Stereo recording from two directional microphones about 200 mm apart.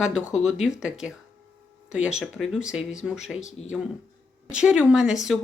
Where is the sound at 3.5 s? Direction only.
35° left (ahead or behind).